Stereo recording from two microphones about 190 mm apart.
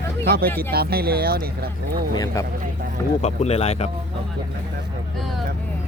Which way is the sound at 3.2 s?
35° left (ahead or behind).